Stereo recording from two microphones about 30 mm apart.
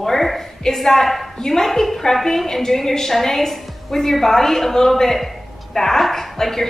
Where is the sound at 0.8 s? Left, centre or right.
Centre.